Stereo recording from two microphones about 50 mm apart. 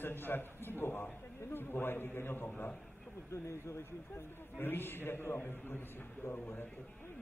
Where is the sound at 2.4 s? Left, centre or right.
Left.